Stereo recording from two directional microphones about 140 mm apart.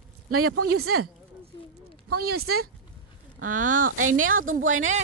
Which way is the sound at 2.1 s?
90° right.